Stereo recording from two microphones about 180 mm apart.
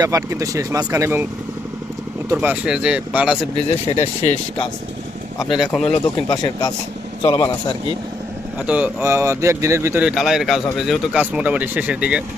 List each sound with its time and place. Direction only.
0.0 s speech: 20° right (ahead or behind)
2.3 s speech: 10° right (ahead or behind)
3.7 s speech: 35° left (ahead or behind)
5.8 s speech: 30° left (ahead or behind)
8.6 s speech: 5° right (ahead or behind)